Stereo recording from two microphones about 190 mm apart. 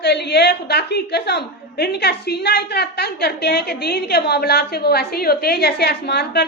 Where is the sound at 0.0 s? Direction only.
60° left (ahead or behind).